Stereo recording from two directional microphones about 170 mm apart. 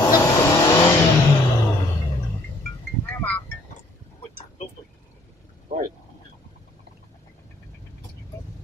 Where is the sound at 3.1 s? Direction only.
10° left (ahead or behind).